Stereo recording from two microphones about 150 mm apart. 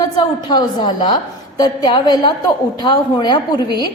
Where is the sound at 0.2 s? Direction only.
30° left (ahead or behind).